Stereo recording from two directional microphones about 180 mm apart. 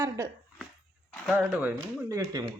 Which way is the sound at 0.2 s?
20° right (ahead or behind).